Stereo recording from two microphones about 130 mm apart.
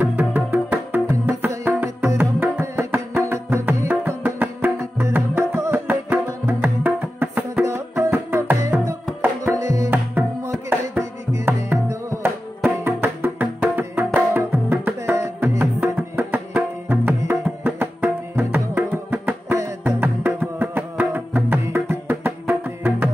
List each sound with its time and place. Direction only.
0.0 s music: 10° right (ahead or behind)